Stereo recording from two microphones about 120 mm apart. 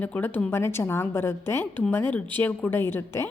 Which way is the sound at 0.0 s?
15° left (ahead or behind).